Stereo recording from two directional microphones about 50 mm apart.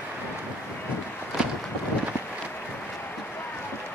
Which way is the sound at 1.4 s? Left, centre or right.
Centre.